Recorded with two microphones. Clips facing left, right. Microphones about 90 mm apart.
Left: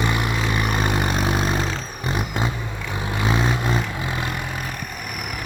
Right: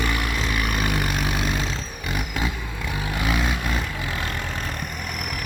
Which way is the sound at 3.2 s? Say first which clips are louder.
Left 4 dB; 25° left (ahead or behind).